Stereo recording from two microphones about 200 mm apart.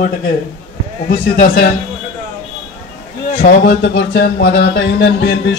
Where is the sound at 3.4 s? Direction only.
55° left (ahead or behind).